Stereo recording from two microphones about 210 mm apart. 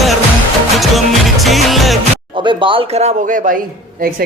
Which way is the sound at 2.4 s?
25° right (ahead or behind).